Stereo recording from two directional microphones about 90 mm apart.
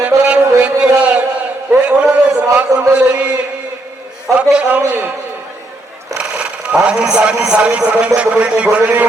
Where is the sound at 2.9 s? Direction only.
10° right (ahead or behind).